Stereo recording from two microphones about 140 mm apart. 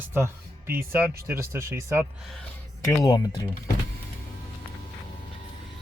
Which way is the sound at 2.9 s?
30° left (ahead or behind).